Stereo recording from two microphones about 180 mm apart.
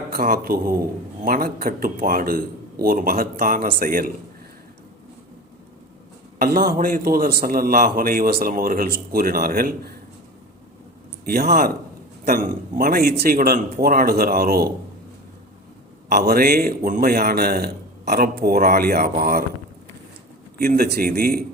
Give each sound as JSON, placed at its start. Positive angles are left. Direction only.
{"t": 0.1, "sound": "a man's voice", "side_deg": -55}
{"t": 6.4, "sound": "a man's voice", "side_deg": -55}
{"t": 11.3, "sound": "a man's voice", "side_deg": -60}
{"t": 16.0, "sound": "a man's voice", "side_deg": -60}
{"t": 20.6, "sound": "a man's voice", "side_deg": -55}